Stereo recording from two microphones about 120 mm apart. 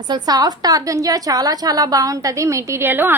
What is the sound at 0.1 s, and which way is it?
A woman's voice, 35° right (ahead or behind).